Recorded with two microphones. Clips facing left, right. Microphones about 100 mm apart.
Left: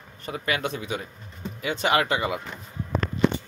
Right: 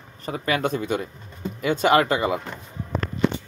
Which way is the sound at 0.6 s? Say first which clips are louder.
Right 6 dB; 45° right (ahead or behind).